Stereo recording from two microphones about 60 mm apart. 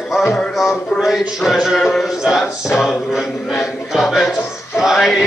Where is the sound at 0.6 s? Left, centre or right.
Centre.